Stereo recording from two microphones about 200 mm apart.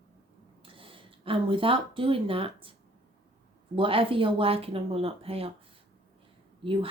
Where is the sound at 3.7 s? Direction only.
25° right (ahead or behind).